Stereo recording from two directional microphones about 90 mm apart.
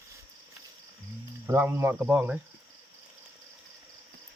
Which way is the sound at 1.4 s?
25° right (ahead or behind).